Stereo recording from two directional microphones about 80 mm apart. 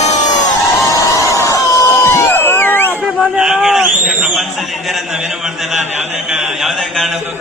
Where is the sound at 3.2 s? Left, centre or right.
Centre.